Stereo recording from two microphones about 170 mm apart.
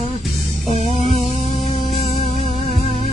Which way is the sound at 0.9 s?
35° left (ahead or behind).